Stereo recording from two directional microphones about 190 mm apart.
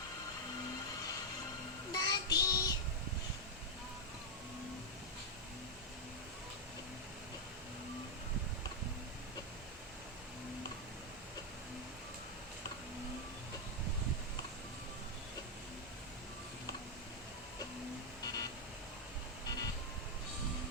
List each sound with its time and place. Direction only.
1.9 s child singing: 20° left (ahead or behind)
18.2 s music: 20° left (ahead or behind)
19.5 s vehicle: 20° left (ahead or behind)